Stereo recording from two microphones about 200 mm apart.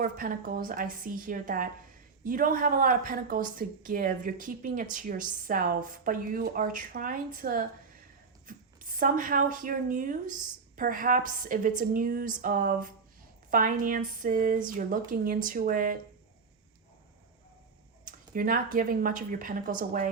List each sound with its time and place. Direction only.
0.0 s a woman's voice: 45° right (ahead or behind)
18.0 s speech: 45° right (ahead or behind)